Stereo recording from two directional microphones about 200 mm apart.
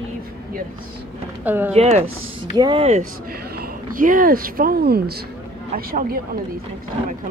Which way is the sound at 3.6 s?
40° right (ahead or behind).